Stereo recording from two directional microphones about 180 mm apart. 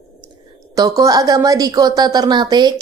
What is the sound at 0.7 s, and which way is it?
Speech, 20° right (ahead or behind).